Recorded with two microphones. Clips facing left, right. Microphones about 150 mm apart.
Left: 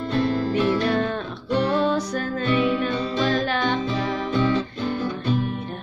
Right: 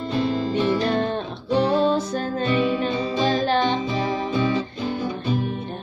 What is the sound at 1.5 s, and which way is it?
Music, 30° right (ahead or behind).